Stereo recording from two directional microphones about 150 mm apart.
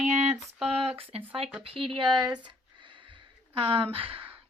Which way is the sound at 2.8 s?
35° right (ahead or behind).